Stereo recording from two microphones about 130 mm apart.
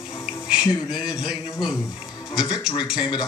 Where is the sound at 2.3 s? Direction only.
35° left (ahead or behind).